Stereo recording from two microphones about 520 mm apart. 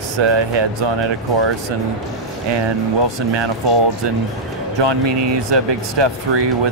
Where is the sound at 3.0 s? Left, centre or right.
Right.